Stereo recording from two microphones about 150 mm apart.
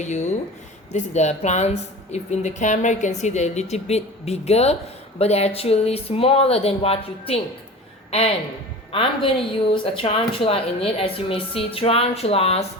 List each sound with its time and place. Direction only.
0.0 s a woman's voice: 50° left (ahead or behind)
8.9 s speech: 35° left (ahead or behind)